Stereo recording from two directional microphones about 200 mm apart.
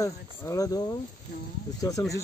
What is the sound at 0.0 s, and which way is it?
Speech, 15° left (ahead or behind).